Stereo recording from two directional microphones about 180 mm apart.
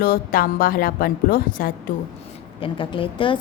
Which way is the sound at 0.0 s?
55° left (ahead or behind).